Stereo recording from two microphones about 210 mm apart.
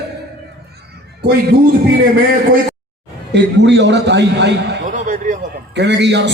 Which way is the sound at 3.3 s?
55° right (ahead or behind).